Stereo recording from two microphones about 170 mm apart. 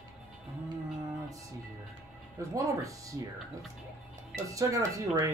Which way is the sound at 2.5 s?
20° right (ahead or behind).